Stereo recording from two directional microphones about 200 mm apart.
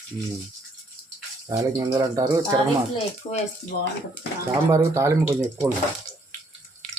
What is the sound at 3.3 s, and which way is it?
Speech, 25° left (ahead or behind).